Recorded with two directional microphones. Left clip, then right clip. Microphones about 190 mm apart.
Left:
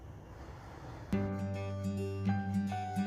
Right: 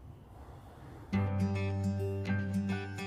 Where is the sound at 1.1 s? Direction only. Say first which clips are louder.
Right 2 dB; centre (ahead or behind).